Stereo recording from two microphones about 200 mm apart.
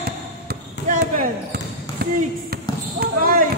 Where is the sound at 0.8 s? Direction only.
45° right (ahead or behind).